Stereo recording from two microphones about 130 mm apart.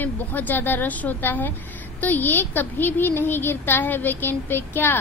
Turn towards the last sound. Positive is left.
turn(degrees=15)  # may be behind; listen again after turning